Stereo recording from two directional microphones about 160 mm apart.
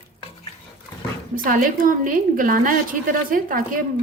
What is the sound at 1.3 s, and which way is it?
A woman's voice, 60° right (ahead or behind).